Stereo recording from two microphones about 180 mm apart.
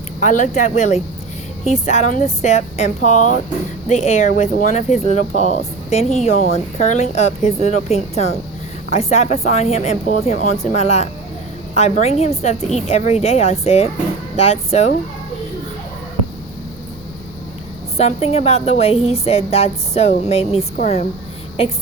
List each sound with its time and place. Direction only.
0.2 s a woman's voice: 45° left (ahead or behind)
17.9 s a woman's voice: 35° left (ahead or behind)